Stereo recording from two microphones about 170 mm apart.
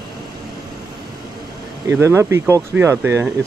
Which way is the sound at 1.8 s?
15° right (ahead or behind).